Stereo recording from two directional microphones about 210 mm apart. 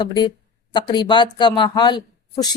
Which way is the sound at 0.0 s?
20° left (ahead or behind).